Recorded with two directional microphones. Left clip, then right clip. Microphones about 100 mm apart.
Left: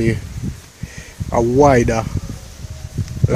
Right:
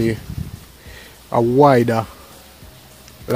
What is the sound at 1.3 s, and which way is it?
Speech, 20° right (ahead or behind).